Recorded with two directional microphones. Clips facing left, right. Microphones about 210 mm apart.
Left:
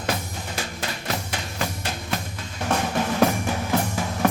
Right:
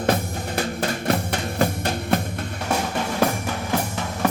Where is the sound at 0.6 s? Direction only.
40° right (ahead or behind).